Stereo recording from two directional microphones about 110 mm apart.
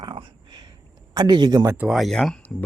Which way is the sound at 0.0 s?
45° right (ahead or behind).